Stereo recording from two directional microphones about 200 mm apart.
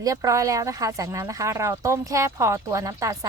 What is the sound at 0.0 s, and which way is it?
Speech, 15° right (ahead or behind).